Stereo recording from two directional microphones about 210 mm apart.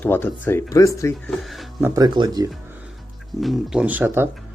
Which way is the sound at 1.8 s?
15° right (ahead or behind).